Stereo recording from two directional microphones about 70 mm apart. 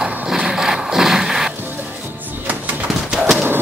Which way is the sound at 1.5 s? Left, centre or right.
Right.